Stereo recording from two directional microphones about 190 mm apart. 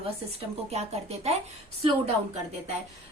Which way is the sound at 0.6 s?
35° right (ahead or behind).